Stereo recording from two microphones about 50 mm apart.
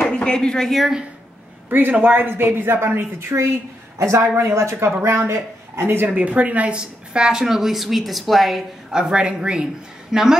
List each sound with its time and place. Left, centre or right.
0.1 s speech: centre
1.7 s a woman's voice: right
4.0 s speech: right
5.0 s speech: right
6.1 s speech: right
6.8 s a woman's voice: centre
8.9 s speech: centre